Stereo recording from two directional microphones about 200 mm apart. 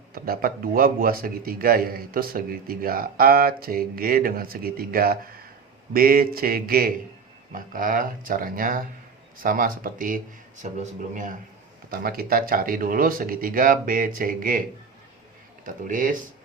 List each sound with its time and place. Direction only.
0.1 s a man's voice: 45° right (ahead or behind)
15.6 s speech: 40° right (ahead or behind)